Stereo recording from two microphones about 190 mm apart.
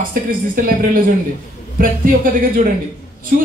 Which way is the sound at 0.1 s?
45° right (ahead or behind).